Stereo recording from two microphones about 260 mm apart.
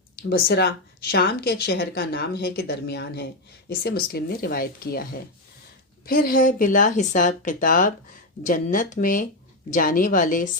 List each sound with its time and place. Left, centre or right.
0.3 s a woman's voice: left
6.1 s a woman's voice: left